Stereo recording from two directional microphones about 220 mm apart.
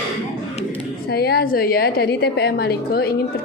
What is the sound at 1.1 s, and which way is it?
A woman's voice, 45° left (ahead or behind).